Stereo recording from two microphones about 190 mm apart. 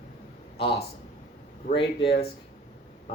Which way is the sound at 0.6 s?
30° left (ahead or behind).